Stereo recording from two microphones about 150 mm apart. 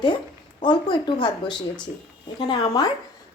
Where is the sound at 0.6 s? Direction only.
30° left (ahead or behind).